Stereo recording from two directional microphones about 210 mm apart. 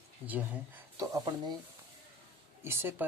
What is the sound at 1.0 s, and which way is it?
Speech, 20° right (ahead or behind).